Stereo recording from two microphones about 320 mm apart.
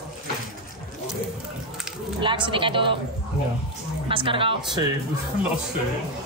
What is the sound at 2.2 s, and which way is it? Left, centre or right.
Speech, centre.